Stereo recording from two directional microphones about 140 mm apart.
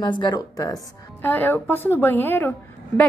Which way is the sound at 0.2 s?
25° left (ahead or behind).